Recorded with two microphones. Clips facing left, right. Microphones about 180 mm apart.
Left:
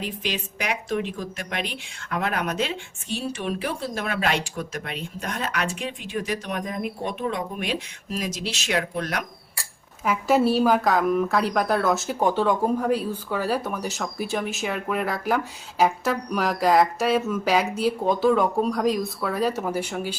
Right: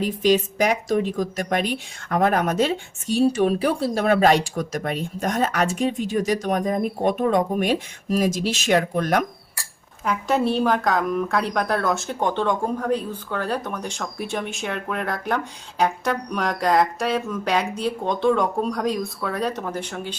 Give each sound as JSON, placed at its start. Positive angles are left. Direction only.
{"t": 0.3, "sound": "a woman's voice", "side_deg": -40}
{"t": 10.0, "sound": "speech", "side_deg": 5}